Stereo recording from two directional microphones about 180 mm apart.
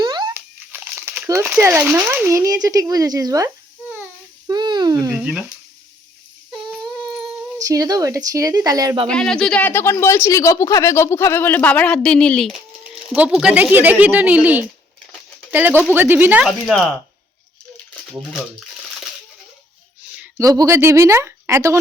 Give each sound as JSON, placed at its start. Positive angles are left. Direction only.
{"t": 0.0, "sound": "a sound", "side_deg": -25}
{"t": 0.3, "sound": "speech", "side_deg": -10}
{"t": 4.4, "sound": "a sound", "side_deg": -25}
{"t": 5.2, "sound": "speech", "side_deg": 0}
{"t": 6.7, "sound": "a sound", "side_deg": 0}
{"t": 7.6, "sound": "a woman's voice", "side_deg": -20}
{"t": 9.0, "sound": "speech", "side_deg": 5}
{"t": 16.5, "sound": "speech", "side_deg": 0}
{"t": 20.4, "sound": "speech", "side_deg": -20}